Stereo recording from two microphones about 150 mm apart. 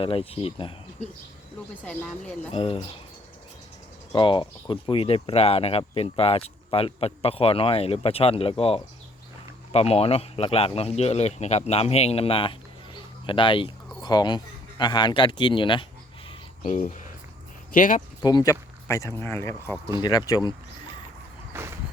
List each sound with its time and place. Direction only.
0.0 s speech: 40° left (ahead or behind)
1.8 s speech: 5° left (ahead or behind)
2.5 s speech: 40° left (ahead or behind)
4.1 s speech: 35° left (ahead or behind)
16.6 s speech: 50° left (ahead or behind)
18.2 s speech: 25° left (ahead or behind)
21.5 s a sound: 15° right (ahead or behind)